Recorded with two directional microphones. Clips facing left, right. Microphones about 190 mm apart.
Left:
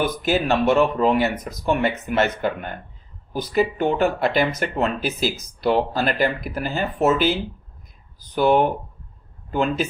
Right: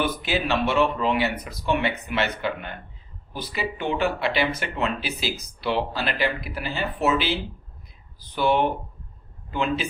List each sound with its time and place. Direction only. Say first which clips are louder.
0.0 s speech: left 4 dB; 45° left (ahead or behind)